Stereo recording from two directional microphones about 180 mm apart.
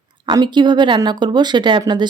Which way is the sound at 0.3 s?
25° right (ahead or behind).